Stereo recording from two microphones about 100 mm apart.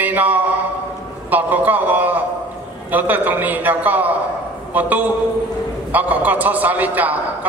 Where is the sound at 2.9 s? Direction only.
15° right (ahead or behind).